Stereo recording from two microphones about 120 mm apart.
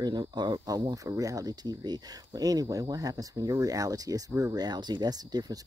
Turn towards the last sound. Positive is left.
turn(degrees=-35)  # may be behind; listen again after turning